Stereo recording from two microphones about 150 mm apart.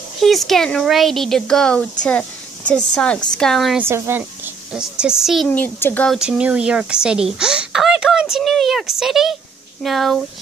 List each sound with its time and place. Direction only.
0.2 s speech: centre (ahead or behind)
3.8 s speech: 15° right (ahead or behind)
4.7 s speech: 5° right (ahead or behind)
5.5 s a woman's voice: 10° left (ahead or behind)
6.0 s speech: 5° right (ahead or behind)